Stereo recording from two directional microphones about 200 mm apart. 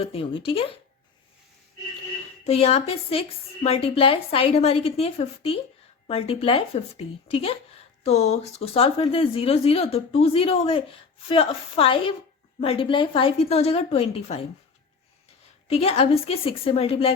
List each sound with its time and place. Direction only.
0.0 s speech: 30° left (ahead or behind)
2.5 s speech: 30° left (ahead or behind)
15.6 s speech: 30° left (ahead or behind)